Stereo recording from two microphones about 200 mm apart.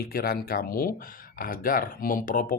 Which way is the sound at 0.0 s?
50° left (ahead or behind).